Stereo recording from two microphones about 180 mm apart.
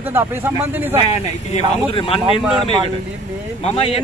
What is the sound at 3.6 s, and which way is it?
Speech, 35° left (ahead or behind).